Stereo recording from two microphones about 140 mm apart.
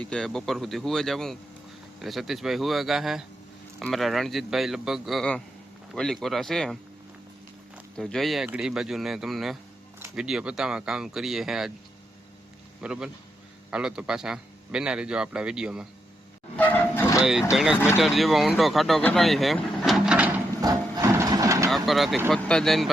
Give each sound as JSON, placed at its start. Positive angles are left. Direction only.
{"t": 0.0, "sound": "a man's voice", "side_deg": 5}
{"t": 7.9, "sound": "a man's voice", "side_deg": 0}
{"t": 12.8, "sound": "a man's voice", "side_deg": -5}
{"t": 16.6, "sound": "a sound", "side_deg": 10}
{"t": 17.2, "sound": "a man's voice", "side_deg": -5}
{"t": 19.0, "sound": "vehicle", "side_deg": 0}
{"t": 20.6, "sound": "a sound", "side_deg": -25}
{"t": 21.8, "sound": "a man's voice", "side_deg": 0}